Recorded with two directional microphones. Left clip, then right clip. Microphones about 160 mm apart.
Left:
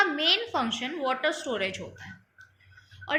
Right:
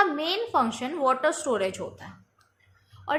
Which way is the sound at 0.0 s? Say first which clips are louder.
Left 1 dB; 35° right (ahead or behind).